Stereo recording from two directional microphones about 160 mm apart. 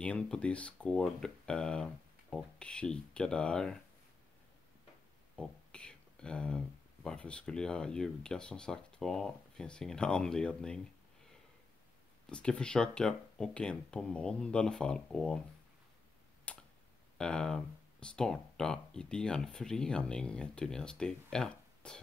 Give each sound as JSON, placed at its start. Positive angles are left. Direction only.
{"t": 0.0, "sound": "speech", "side_deg": 5}
{"t": 5.3, "sound": "speech", "side_deg": 5}
{"t": 12.3, "sound": "speech", "side_deg": 5}
{"t": 16.5, "sound": "tick", "side_deg": 5}
{"t": 17.2, "sound": "speech", "side_deg": 5}